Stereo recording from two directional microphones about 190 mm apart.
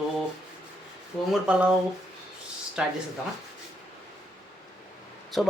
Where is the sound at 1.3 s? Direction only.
5° right (ahead or behind).